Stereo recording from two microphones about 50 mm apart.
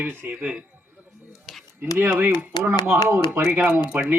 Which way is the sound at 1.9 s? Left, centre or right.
Right.